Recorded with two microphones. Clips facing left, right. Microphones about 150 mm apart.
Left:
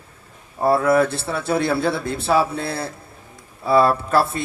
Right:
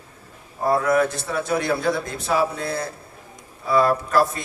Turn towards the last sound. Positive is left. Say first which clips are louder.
# left 2 dB
turn(degrees=30)  # may be behind; listen again after turning